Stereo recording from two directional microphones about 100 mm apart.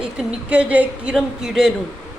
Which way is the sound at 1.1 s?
Centre (ahead or behind).